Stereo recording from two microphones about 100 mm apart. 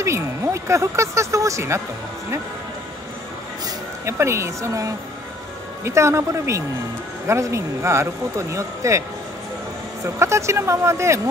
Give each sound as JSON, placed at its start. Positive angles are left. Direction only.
{"t": 0.0, "sound": "speech", "side_deg": -30}
{"t": 4.0, "sound": "speech", "side_deg": -30}
{"t": 10.0, "sound": "speech", "side_deg": -30}